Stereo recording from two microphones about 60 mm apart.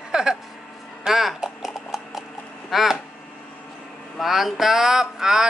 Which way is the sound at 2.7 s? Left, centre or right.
Centre.